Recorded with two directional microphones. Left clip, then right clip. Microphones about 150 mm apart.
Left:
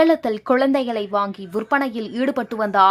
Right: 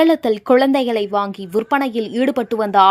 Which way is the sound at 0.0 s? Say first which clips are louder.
Right 2 dB; 40° right (ahead or behind).